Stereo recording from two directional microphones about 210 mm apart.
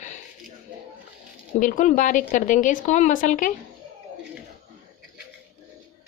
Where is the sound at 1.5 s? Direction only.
40° left (ahead or behind).